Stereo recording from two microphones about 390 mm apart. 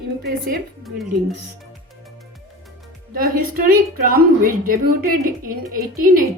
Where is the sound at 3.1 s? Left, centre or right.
Right.